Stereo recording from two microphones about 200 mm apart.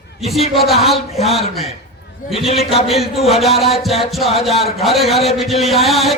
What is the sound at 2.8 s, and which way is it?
A man's voice, centre (ahead or behind).